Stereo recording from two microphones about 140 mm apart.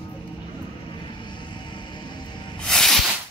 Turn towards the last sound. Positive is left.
turn(degrees=5)  # may be behind; listen again after turning